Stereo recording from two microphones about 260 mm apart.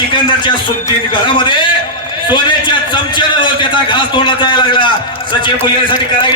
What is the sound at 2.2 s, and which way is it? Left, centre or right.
A man's voice, centre.